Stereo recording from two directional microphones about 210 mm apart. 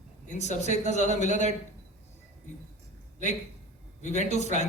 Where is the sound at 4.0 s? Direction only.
35° left (ahead or behind).